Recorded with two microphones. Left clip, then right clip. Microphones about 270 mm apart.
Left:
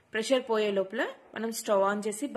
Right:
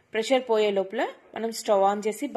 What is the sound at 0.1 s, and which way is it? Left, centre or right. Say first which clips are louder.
A woman's voice: right 4 dB; centre.